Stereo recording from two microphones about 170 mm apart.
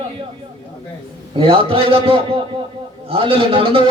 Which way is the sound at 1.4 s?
35° right (ahead or behind).